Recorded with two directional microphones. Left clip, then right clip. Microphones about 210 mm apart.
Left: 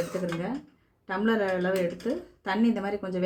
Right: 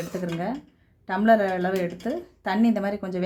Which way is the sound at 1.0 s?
55° right (ahead or behind).